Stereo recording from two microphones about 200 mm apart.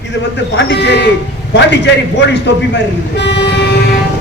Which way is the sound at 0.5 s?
60° left (ahead or behind).